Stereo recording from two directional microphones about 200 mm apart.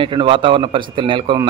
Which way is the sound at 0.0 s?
25° right (ahead or behind).